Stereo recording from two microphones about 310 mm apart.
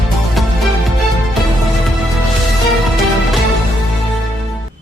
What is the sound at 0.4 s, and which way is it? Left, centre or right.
Music, centre.